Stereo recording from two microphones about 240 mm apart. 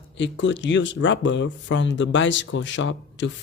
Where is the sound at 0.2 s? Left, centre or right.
Left.